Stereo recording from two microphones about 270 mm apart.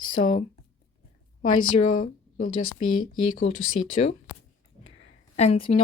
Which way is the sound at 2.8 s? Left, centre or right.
Left.